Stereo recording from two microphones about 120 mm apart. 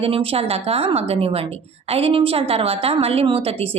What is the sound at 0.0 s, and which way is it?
A woman's voice, 50° right (ahead or behind).